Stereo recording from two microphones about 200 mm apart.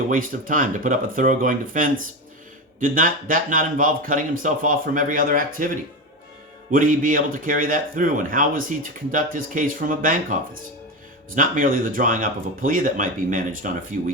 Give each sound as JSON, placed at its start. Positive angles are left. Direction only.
{"t": 0.1, "sound": "speech", "side_deg": -45}